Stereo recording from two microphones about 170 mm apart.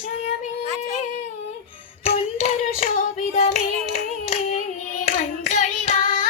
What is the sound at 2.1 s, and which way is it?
Child singing, 40° left (ahead or behind).